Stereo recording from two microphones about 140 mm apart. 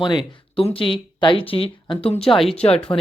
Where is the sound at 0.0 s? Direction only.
35° left (ahead or behind).